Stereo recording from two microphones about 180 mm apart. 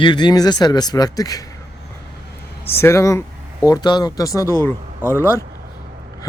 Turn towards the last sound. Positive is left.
turn(degrees=15)  # may be behind; listen again after turning